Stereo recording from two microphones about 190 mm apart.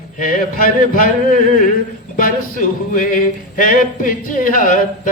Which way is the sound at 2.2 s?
45° left (ahead or behind).